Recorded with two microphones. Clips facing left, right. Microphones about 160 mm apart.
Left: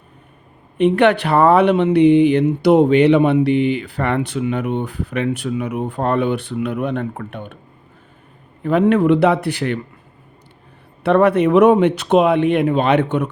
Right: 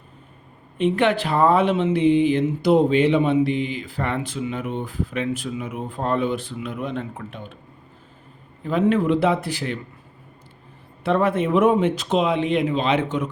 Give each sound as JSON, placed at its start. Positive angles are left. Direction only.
{"t": 0.8, "sound": "speech", "side_deg": 65}
{"t": 8.6, "sound": "speech", "side_deg": 65}
{"t": 11.0, "sound": "a man's voice", "side_deg": 65}